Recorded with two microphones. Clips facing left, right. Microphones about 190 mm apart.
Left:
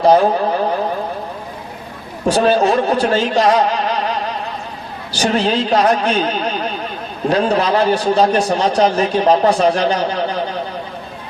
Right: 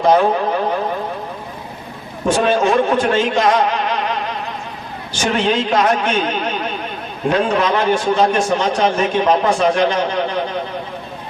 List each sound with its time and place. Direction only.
0.0 s a man's voice: 35° left (ahead or behind)
2.2 s a man's voice: 35° left (ahead or behind)